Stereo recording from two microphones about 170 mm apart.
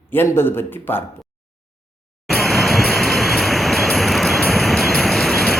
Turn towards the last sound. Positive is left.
turn(degrees=0)  # may be behind; listen again after turning